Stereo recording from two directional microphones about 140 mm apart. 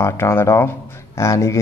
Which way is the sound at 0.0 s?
15° left (ahead or behind).